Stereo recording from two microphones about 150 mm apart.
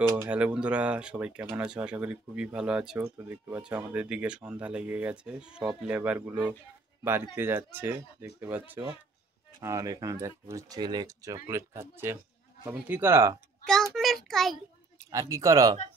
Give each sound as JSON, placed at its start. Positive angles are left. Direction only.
{"t": 0.0, "sound": "speech", "side_deg": -20}
{"t": 0.3, "sound": "speech", "side_deg": -10}
{"t": 13.9, "sound": "a sound", "side_deg": 0}
{"t": 15.0, "sound": "speech", "side_deg": -20}